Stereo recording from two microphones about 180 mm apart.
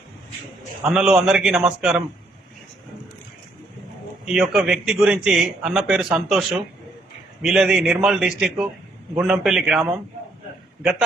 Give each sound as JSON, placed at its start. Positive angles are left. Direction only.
{"t": 0.9, "sound": "a man's voice", "side_deg": -5}
{"t": 4.3, "sound": "a man's voice", "side_deg": -5}